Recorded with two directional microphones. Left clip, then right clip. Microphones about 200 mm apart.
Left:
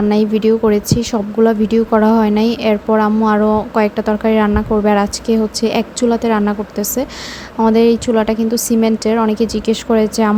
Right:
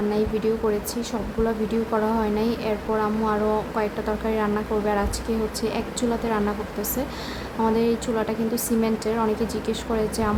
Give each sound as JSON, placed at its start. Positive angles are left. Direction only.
{"t": 0.1, "sound": "speech", "side_deg": 40}
{"t": 7.6, "sound": "speech", "side_deg": 35}